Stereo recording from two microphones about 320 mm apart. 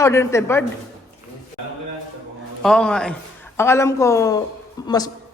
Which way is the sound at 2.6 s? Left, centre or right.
Centre.